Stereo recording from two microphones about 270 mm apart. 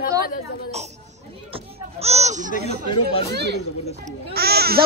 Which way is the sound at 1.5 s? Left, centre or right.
Right.